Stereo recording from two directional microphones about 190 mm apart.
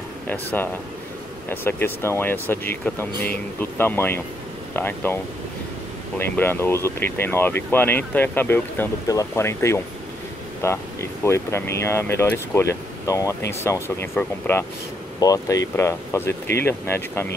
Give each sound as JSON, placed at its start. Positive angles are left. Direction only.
{"t": 0.3, "sound": "speech", "side_deg": 10}